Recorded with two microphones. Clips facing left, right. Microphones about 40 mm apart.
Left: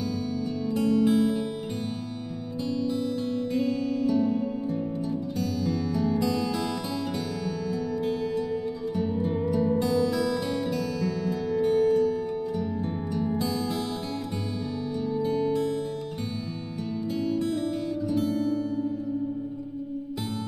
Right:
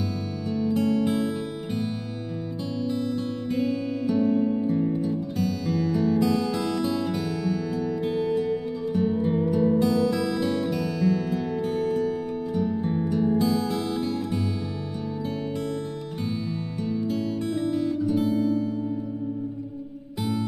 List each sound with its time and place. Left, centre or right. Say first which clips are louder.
0.2 s music: right 2 dB; centre
3.4 s music: right 2 dB; centre